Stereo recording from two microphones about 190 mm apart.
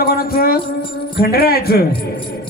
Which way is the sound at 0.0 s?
55° left (ahead or behind).